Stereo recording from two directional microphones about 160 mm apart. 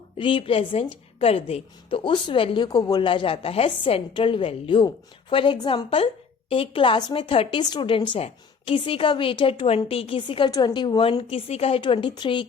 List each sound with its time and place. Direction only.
0.2 s a woman's voice: 30° left (ahead or behind)